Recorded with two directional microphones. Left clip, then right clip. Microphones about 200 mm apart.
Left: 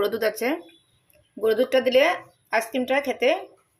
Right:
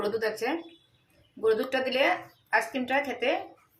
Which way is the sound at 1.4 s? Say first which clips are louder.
Left 6 dB; 40° left (ahead or behind).